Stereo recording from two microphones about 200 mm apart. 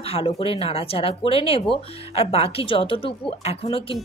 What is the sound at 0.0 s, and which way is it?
Speech, 30° left (ahead or behind).